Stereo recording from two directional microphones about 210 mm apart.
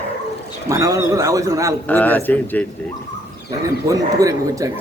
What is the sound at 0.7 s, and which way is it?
Speech, 15° right (ahead or behind).